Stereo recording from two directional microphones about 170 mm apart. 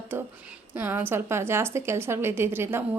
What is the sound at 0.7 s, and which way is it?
A woman's voice, 10° right (ahead or behind).